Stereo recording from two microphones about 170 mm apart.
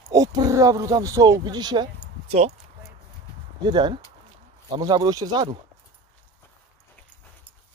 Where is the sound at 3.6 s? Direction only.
25° right (ahead or behind).